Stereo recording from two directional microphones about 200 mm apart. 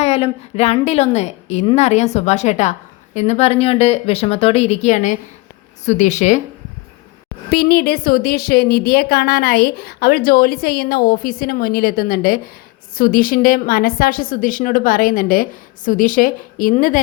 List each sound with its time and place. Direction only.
0.0 s a woman's voice: 30° left (ahead or behind)
7.5 s a woman's voice: 50° left (ahead or behind)